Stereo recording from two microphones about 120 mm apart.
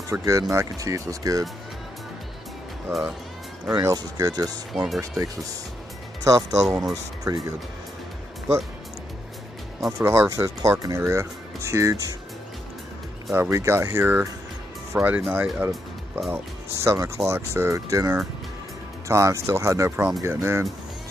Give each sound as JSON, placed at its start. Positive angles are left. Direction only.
{"t": 0.1, "sound": "speech", "side_deg": -25}
{"t": 2.9, "sound": "speech", "side_deg": -5}
{"t": 3.8, "sound": "speech", "side_deg": -30}
{"t": 4.7, "sound": "speech", "side_deg": 0}
{"t": 6.2, "sound": "speech", "side_deg": -25}
{"t": 8.5, "sound": "speech", "side_deg": -60}
{"t": 9.8, "sound": "speech", "side_deg": -20}
{"t": 13.3, "sound": "speech", "side_deg": -25}
{"t": 16.7, "sound": "speech", "side_deg": -25}